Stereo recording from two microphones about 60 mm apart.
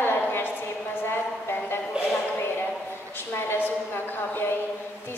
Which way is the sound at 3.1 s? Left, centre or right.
Left.